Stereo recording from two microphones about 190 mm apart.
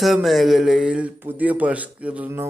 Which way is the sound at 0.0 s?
Centre (ahead or behind).